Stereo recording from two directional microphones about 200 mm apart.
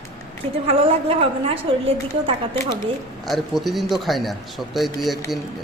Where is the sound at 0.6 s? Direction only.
30° right (ahead or behind).